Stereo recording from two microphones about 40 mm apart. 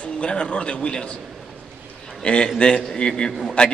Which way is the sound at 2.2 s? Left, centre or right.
Left.